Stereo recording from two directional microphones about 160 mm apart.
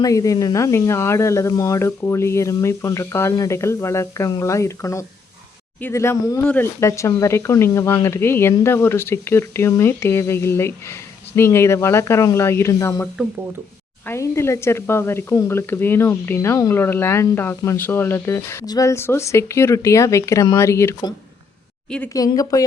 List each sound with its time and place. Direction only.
0.0 s speech: 20° left (ahead or behind)
14.1 s speech: 15° left (ahead or behind)
21.8 s a woman's voice: 5° left (ahead or behind)
22.1 s a woman's voice: 20° left (ahead or behind)